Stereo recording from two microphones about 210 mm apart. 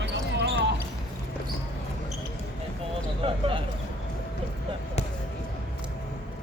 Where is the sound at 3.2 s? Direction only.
25° right (ahead or behind).